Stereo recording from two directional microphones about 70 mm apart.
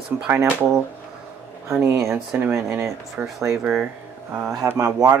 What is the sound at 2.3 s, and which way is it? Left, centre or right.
Speech, right.